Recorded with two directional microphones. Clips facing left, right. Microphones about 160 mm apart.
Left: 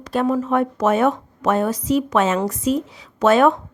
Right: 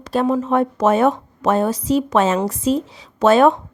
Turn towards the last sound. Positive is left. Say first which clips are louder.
# right 2 dB
turn(degrees=-30)  # may be behind; listen again after turning